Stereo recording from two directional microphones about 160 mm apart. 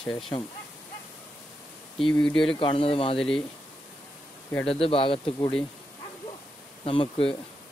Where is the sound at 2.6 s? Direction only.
35° left (ahead or behind).